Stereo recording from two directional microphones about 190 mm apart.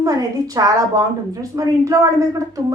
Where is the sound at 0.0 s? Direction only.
20° right (ahead or behind).